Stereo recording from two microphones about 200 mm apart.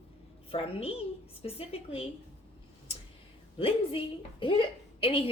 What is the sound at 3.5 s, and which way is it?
A woman's voice, 25° left (ahead or behind).